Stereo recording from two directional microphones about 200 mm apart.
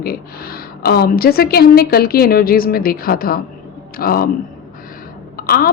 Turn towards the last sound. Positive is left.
turn(degrees=45)  # may be behind; listen again after turning